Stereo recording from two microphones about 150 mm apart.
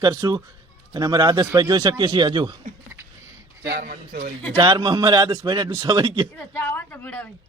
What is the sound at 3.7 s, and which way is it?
Speech, 85° right.